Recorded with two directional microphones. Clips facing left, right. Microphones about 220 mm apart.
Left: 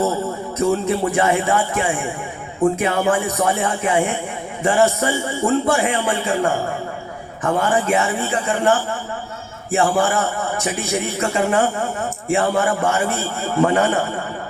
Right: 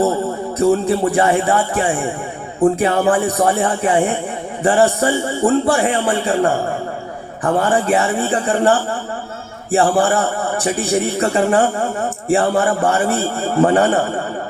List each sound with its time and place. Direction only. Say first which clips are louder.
0.9 s a man's voice: right 3 dB; 35° right (ahead or behind)